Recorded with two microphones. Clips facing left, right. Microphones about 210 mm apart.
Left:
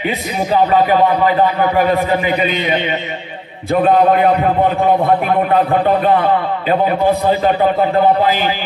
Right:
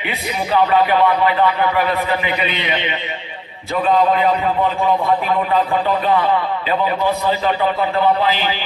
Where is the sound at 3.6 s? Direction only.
55° left (ahead or behind).